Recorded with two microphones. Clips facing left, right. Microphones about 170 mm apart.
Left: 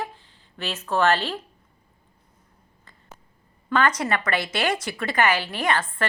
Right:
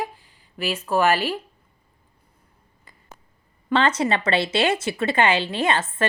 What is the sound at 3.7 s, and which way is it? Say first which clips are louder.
A woman's voice: right 2 dB; 25° right (ahead or behind).